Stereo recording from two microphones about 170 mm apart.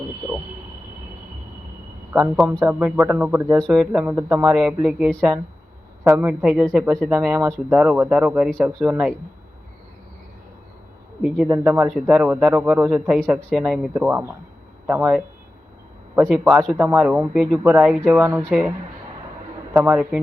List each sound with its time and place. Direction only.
2.1 s speech: 15° right (ahead or behind)
6.1 s speech: 10° right (ahead or behind)
7.3 s speech: 20° right (ahead or behind)
7.7 s speech: 10° right (ahead or behind)
11.2 s speech: 5° right (ahead or behind)
16.3 s speech: 10° right (ahead or behind)
19.7 s speech: 10° right (ahead or behind)